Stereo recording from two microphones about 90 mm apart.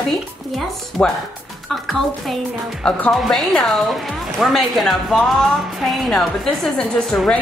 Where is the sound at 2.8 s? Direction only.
15° left (ahead or behind).